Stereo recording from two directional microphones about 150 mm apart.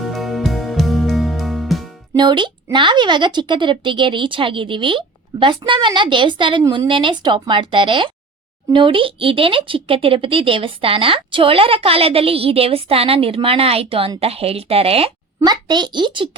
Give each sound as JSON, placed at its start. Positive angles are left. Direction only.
{"t": 0.0, "sound": "music", "side_deg": 0}
{"t": 2.1, "sound": "speech", "side_deg": -30}
{"t": 15.4, "sound": "speech", "side_deg": -30}